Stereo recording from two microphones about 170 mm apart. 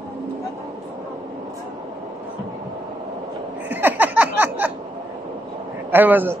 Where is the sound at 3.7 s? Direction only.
10° right (ahead or behind).